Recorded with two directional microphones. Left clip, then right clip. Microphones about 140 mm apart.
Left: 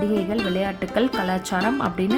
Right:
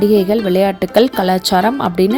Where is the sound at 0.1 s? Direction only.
40° right (ahead or behind).